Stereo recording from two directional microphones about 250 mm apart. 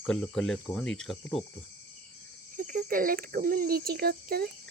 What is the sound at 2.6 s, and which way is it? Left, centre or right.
Speech, right.